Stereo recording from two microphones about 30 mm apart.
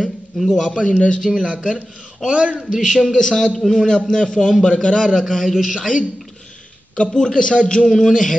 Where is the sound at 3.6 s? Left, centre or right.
Centre.